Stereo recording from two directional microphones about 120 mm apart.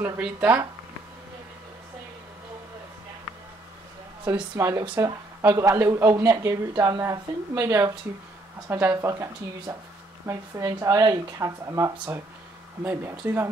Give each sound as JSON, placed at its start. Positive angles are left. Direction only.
{"t": 0.0, "sound": "speech", "side_deg": -10}
{"t": 4.6, "sound": "speech", "side_deg": -25}